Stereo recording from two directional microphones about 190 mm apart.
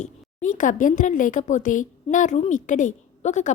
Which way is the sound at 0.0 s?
45° left (ahead or behind).